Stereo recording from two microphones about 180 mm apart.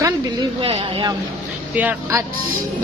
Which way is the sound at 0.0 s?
25° right (ahead or behind).